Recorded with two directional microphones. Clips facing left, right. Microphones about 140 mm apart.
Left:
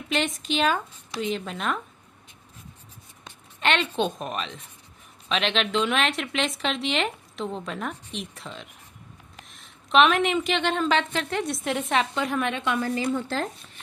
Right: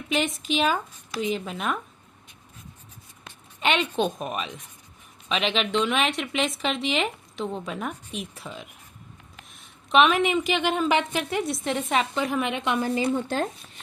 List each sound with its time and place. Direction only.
0.1 s speech: 5° right (ahead or behind)
3.6 s a woman's voice: 10° right (ahead or behind)